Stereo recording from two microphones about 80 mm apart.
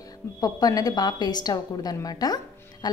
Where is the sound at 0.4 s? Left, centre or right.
Left.